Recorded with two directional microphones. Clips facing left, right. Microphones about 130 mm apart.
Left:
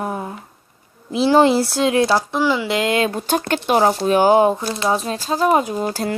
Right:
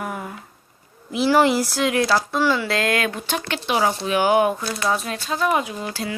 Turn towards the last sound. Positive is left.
turn(degrees=45)  # may be behind; listen again after turning